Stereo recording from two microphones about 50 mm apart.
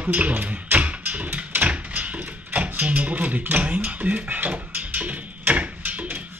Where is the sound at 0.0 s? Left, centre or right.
Right.